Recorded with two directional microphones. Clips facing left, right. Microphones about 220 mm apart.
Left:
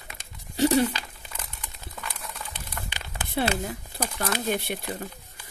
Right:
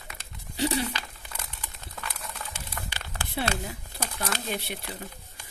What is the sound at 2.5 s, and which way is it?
Crumpling, 20° left (ahead or behind).